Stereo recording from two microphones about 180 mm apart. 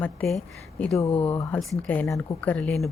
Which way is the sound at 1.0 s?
30° left (ahead or behind).